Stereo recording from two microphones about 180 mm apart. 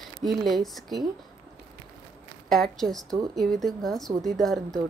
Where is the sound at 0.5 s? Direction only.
Centre (ahead or behind).